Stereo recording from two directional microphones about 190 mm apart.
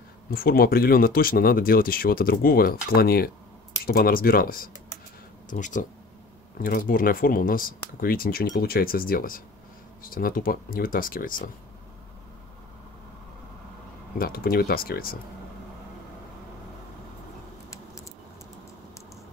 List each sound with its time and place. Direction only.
0.3 s speech: 50° left (ahead or behind)
14.1 s speech: 50° left (ahead or behind)